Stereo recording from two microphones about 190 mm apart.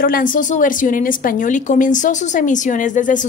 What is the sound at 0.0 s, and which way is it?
A woman's voice, 45° left (ahead or behind).